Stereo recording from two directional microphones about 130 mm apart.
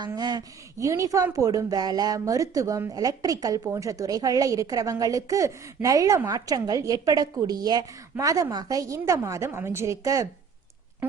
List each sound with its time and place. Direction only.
0.0 s speech: 35° right (ahead or behind)